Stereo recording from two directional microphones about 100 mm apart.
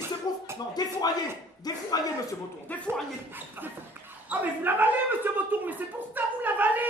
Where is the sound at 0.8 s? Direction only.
40° left (ahead or behind).